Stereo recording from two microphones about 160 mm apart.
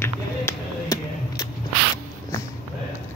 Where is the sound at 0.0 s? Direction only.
20° left (ahead or behind).